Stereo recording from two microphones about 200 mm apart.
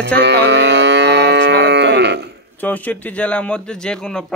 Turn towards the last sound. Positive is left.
turn(degrees=5)  # may be behind; listen again after turning